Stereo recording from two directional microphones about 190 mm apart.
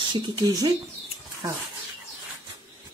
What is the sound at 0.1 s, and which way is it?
Speech, 25° right (ahead or behind).